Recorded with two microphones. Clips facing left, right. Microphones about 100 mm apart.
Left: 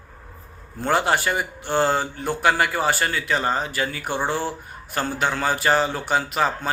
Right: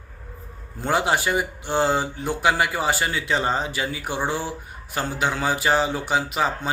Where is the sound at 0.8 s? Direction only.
15° right (ahead or behind).